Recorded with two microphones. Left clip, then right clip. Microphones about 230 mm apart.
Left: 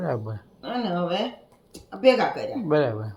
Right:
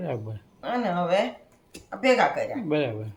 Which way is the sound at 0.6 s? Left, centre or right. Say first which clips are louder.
Right 1 dB; right.